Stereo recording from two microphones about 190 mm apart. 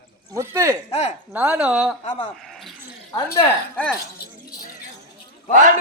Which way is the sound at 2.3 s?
Centre (ahead or behind).